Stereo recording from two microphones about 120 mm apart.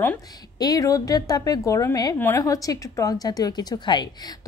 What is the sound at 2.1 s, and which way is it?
Speech, 20° left (ahead or behind).